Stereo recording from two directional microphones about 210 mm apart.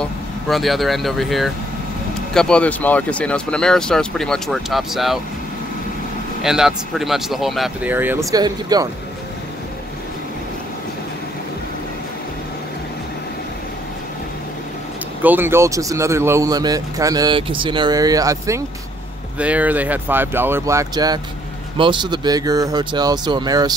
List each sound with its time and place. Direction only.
0.0 s speech: centre (ahead or behind)
6.4 s speech: centre (ahead or behind); by 8.8 s 20° right (ahead or behind)
15.2 s speech: 10° right (ahead or behind)